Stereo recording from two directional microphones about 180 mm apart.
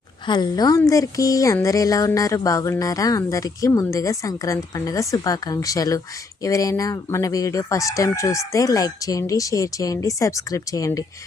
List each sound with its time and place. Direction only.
0.3 s a woman's voice: 25° left (ahead or behind)